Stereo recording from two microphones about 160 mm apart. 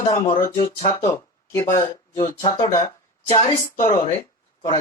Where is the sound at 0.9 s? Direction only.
15° left (ahead or behind).